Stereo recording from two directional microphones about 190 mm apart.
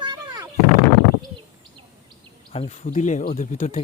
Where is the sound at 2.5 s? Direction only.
35° left (ahead or behind).